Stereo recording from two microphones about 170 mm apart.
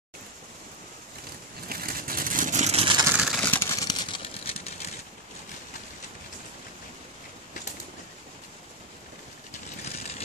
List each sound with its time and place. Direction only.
1.7 s vehicle: 60° right (ahead or behind); by 3.1 s 30° right (ahead or behind)
3.1 s vehicle: 5° right (ahead or behind)
3.4 s a sound: 15° left (ahead or behind)
3.8 s vehicle: 30° left (ahead or behind)
9.8 s vehicle: 40° left (ahead or behind)